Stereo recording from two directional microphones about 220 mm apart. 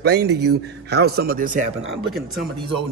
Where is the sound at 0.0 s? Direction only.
50° right (ahead or behind).